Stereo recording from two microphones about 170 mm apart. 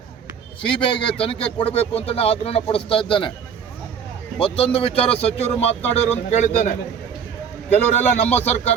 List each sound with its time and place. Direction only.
0.6 s speech: 30° left (ahead or behind)
4.4 s speech: 30° left (ahead or behind)
8.2 s speech: 40° left (ahead or behind)